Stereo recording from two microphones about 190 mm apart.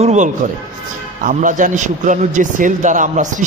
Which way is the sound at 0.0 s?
35° right (ahead or behind).